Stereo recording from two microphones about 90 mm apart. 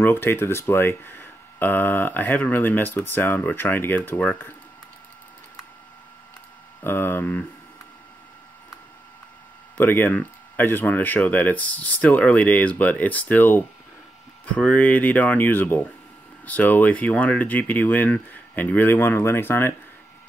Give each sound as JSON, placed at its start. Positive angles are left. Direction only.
{"t": 0.0, "sound": "speech", "side_deg": 25}
{"t": 6.8, "sound": "speech", "side_deg": 25}
{"t": 9.8, "sound": "speech", "side_deg": 20}